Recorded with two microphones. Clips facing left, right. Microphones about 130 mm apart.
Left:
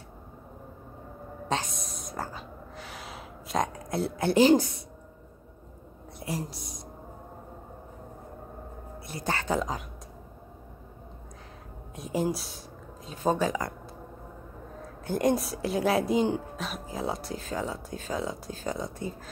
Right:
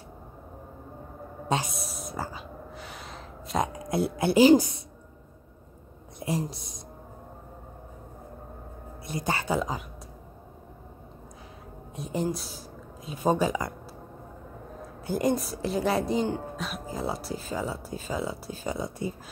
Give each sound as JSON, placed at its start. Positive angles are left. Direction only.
{"t": 1.5, "sound": "a sound", "side_deg": -10}
{"t": 3.7, "sound": "speech", "side_deg": -10}
{"t": 6.1, "sound": "a woman's voice", "side_deg": -20}
{"t": 9.0, "sound": "speech", "side_deg": -15}
{"t": 11.9, "sound": "a sound", "side_deg": 0}
{"t": 13.1, "sound": "speech", "side_deg": -10}
{"t": 15.0, "sound": "speech", "side_deg": -5}